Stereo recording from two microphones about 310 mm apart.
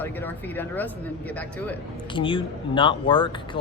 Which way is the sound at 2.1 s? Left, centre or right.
Centre.